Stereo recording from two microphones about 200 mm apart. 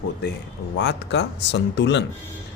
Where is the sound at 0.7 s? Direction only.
60° left (ahead or behind).